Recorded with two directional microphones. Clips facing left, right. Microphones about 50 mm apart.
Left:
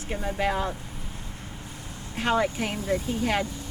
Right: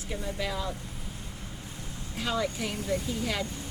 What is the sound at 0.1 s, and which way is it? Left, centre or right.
Speech, left.